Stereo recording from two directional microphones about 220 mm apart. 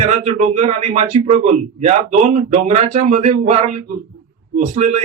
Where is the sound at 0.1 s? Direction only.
30° right (ahead or behind).